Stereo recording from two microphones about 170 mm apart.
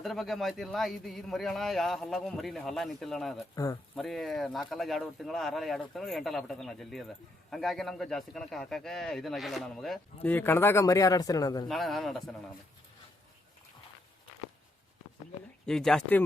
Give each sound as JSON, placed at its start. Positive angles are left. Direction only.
{"t": 0.0, "sound": "a man's voice", "side_deg": 0}
{"t": 3.5, "sound": "speech", "side_deg": 20}
{"t": 3.9, "sound": "a man's voice", "side_deg": 0}
{"t": 10.3, "sound": "speech", "side_deg": 15}
{"t": 11.7, "sound": "a man's voice", "side_deg": 0}
{"t": 15.6, "sound": "a man's voice", "side_deg": 5}